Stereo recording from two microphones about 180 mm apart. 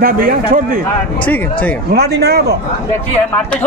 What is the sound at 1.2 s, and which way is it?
Speech, 10° left (ahead or behind).